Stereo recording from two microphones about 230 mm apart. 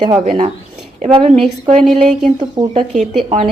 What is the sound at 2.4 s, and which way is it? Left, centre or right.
Speech, centre.